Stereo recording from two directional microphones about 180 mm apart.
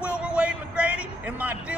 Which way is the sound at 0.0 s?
5° right (ahead or behind).